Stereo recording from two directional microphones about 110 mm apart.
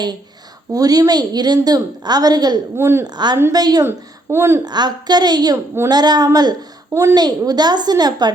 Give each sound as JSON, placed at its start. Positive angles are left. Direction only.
{"t": 0.7, "sound": "a woman's voice", "side_deg": -35}
{"t": 2.7, "sound": "a woman's voice", "side_deg": -20}
{"t": 3.0, "sound": "a woman's voice", "side_deg": -40}
{"t": 3.8, "sound": "a woman's voice", "side_deg": -20}
{"t": 4.6, "sound": "a woman's voice", "side_deg": -40}